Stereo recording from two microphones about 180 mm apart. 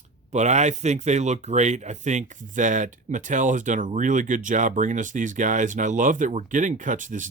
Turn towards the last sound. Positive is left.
turn(degrees=-45)  # may be behind; listen again after turning